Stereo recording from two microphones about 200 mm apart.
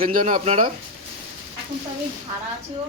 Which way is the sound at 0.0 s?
45° right (ahead or behind).